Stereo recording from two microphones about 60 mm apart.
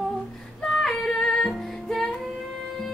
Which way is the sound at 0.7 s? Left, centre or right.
Centre.